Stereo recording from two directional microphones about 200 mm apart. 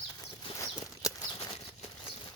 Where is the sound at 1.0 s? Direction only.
20° left (ahead or behind).